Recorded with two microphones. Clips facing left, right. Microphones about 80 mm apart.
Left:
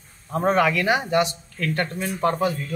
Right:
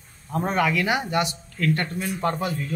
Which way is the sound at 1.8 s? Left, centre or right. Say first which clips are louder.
Left 1 dB; left.